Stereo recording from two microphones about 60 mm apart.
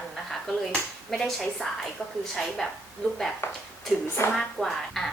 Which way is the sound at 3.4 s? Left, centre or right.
Left.